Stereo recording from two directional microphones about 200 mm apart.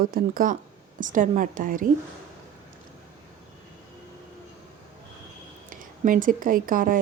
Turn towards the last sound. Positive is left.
turn(degrees=-45)  # may be behind; listen again after turning